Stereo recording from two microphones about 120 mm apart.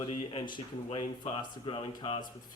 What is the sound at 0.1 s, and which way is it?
A man's voice, 45° left (ahead or behind).